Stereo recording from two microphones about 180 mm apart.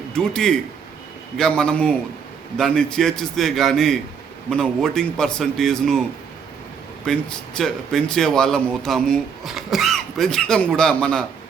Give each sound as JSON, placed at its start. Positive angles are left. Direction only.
{"t": 0.1, "sound": "a man's voice", "side_deg": 5}